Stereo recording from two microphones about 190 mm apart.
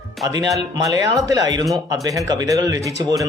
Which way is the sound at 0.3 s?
20° right (ahead or behind).